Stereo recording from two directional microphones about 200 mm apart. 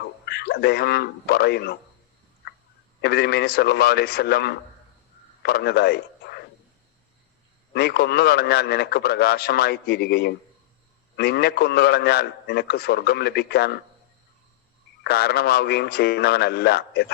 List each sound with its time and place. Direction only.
0.3 s a man's voice: 55° left (ahead or behind)
3.0 s a man's voice: 55° left (ahead or behind)
7.7 s a man's voice: 55° left (ahead or behind)
15.0 s a man's voice: 50° left (ahead or behind)